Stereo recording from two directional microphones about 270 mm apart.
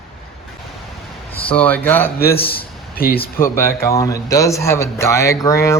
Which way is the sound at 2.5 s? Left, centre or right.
Left.